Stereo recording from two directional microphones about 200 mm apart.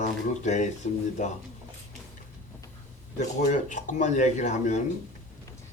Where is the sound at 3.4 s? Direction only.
40° left (ahead or behind).